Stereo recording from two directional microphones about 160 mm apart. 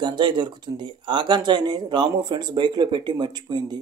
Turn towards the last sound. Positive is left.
turn(degrees=-25)  # may be behind; listen again after turning